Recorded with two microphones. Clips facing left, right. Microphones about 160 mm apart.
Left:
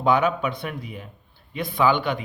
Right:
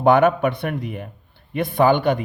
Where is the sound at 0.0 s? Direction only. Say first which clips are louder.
Right 6 dB; 60° right (ahead or behind).